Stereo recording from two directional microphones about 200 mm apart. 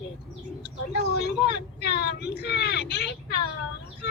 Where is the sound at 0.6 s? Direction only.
55° left (ahead or behind).